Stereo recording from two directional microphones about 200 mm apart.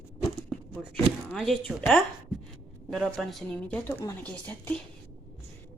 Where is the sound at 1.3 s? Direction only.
Centre (ahead or behind).